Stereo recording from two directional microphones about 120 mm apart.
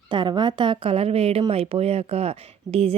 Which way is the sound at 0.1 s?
40° right (ahead or behind).